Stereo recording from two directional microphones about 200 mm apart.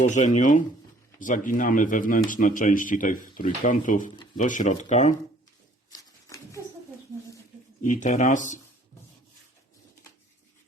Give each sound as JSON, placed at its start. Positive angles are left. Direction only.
{"t": 0.0, "sound": "speech", "side_deg": 35}
{"t": 5.9, "sound": "a sound", "side_deg": 15}
{"t": 7.9, "sound": "speech", "side_deg": 40}